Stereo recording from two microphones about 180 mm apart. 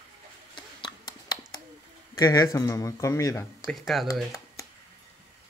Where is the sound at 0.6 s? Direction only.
25° left (ahead or behind).